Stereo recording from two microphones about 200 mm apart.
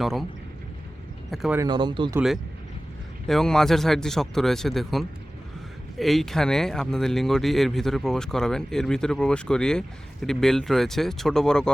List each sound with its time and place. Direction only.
0.0 s speech: centre (ahead or behind)
1.3 s speech: centre (ahead or behind)
1.5 s speech: 20° right (ahead or behind)
2.1 s speech: centre (ahead or behind)